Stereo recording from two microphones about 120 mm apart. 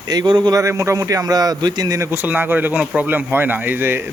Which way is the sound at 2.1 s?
15° right (ahead or behind).